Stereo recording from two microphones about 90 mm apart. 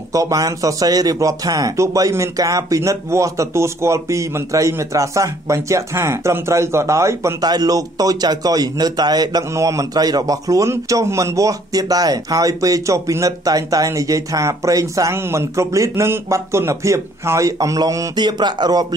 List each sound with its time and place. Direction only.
0.1 s a man's voice: 40° right (ahead or behind)
7.4 s speech: 45° right (ahead or behind)
9.5 s a man's voice: 35° right (ahead or behind)
18.1 s speech: 55° right (ahead or behind)